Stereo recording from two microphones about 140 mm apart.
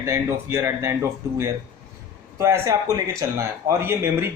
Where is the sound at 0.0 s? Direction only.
20° right (ahead or behind).